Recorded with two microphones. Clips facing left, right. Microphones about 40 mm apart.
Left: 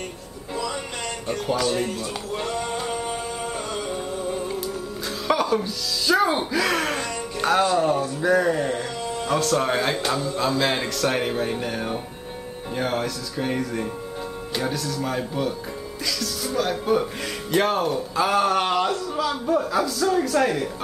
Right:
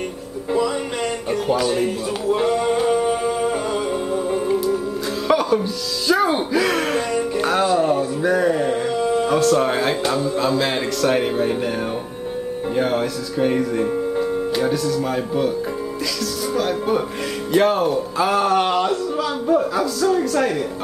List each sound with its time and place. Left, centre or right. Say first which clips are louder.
1.3 s speech: right 3 dB; centre
2.3 s a sound: right 9 dB; centre
4.1 s music: right 7 dB; centre
5.3 s speech: right 4 dB; centre